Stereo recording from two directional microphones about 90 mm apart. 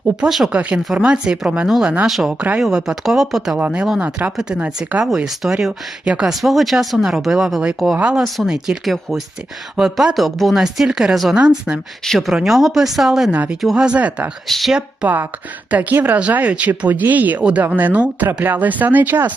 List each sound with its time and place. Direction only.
0.3 s speech: 5° right (ahead or behind)
0.5 s speech: 15° right (ahead or behind)
5.0 s speech: 5° right (ahead or behind)
12.0 s speech: centre (ahead or behind)
13.3 s speech: 20° right (ahead or behind)
13.6 s speech: 5° right (ahead or behind)
14.4 s speech: centre (ahead or behind)
15.0 s speech: 20° right (ahead or behind)